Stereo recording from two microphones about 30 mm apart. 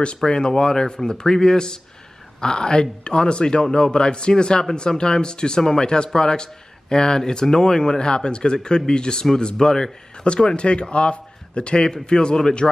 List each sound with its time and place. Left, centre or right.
0.3 s speech: left
10.1 s a man's voice: left